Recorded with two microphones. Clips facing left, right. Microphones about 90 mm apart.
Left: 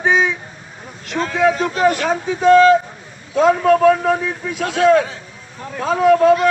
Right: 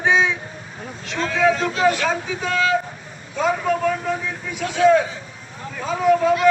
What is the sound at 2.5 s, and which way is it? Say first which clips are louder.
Child singing: left 13 dB; 35° left (ahead or behind).